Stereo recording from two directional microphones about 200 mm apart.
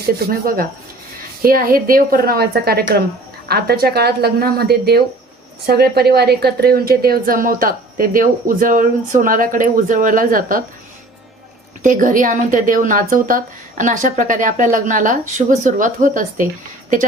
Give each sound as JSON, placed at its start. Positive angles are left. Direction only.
{"t": 0.3, "sound": "a woman's voice", "side_deg": -45}
{"t": 11.8, "sound": "a woman's voice", "side_deg": -40}